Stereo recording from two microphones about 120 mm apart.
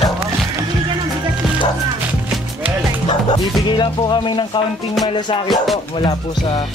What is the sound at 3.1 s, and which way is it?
Speech, 40° left (ahead or behind).